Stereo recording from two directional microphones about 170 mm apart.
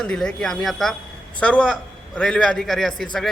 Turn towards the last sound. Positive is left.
turn(degrees=0)  # may be behind; listen again after turning